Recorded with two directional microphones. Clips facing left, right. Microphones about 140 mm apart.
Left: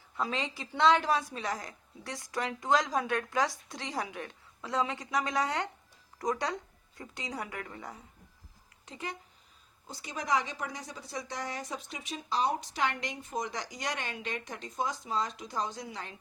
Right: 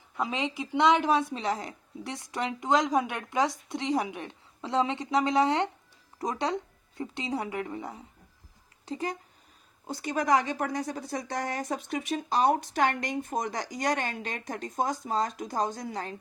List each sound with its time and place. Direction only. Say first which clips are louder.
0.2 s a woman's voice: right 4 dB; 20° right (ahead or behind)
8.9 s speech: right 8 dB; 40° right (ahead or behind)
9.8 s a woman's voice: right 9 dB; 60° right (ahead or behind); by 16.1 s 45° right (ahead or behind)